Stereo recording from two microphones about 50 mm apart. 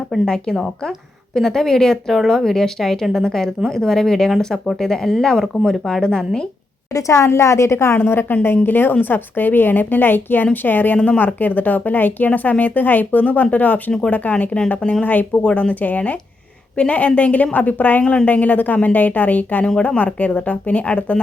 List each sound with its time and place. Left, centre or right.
0.1 s speech: centre
1.4 s speech: centre
6.9 s a woman's voice: left
7.9 s a woman's voice: left
15.4 s a woman's voice: left
15.7 s a woman's voice: left